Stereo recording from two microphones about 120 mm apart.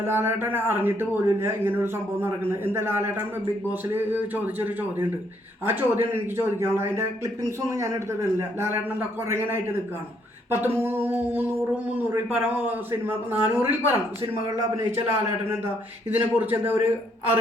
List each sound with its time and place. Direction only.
0.0 s a man's voice: 20° right (ahead or behind)
15.1 s a man's voice: 20° right (ahead or behind)